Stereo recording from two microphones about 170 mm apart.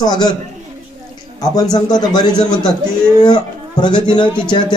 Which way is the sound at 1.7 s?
25° left (ahead or behind).